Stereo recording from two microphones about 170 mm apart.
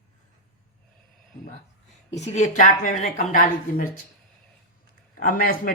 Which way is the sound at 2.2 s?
40° left (ahead or behind).